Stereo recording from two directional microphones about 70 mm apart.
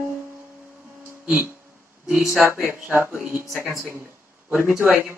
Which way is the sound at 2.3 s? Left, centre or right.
Right.